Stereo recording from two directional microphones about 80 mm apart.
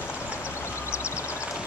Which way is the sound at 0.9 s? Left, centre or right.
Left.